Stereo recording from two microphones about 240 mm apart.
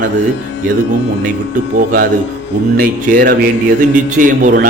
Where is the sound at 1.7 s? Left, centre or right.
Right.